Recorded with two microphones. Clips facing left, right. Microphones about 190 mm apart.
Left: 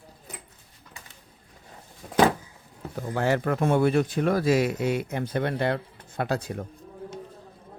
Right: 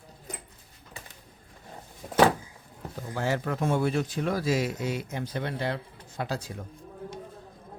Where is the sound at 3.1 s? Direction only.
60° left (ahead or behind).